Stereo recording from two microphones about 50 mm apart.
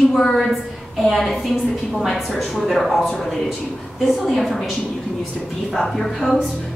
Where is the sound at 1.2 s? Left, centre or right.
Centre.